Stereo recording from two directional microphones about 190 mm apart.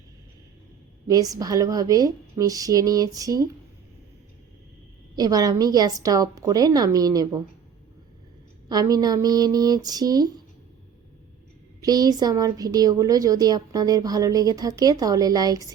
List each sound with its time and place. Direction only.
1.0 s a woman's voice: 20° right (ahead or behind)
5.1 s a woman's voice: 20° right (ahead or behind)
8.7 s a woman's voice: 20° right (ahead or behind)
11.8 s a woman's voice: 20° right (ahead or behind)